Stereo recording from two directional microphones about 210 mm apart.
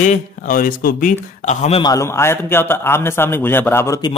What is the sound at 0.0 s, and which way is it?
Speech, 40° left (ahead or behind).